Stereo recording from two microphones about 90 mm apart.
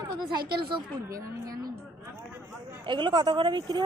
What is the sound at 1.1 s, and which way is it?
Speech, 40° right (ahead or behind).